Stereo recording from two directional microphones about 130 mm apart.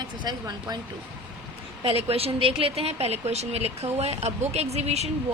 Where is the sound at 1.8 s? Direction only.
50° right (ahead or behind).